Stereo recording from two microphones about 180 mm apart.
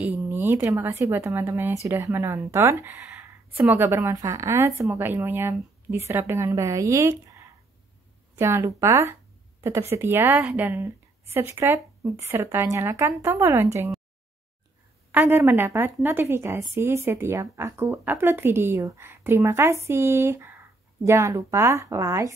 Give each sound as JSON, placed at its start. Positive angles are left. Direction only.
{"t": 0.2, "sound": "a woman's voice", "side_deg": -10}
{"t": 15.0, "sound": "a woman's voice", "side_deg": -10}